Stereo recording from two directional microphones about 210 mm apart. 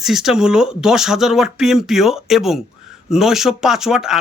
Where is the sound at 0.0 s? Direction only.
Centre (ahead or behind).